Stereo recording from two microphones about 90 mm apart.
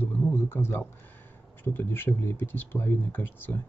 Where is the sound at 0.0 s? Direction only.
20° left (ahead or behind).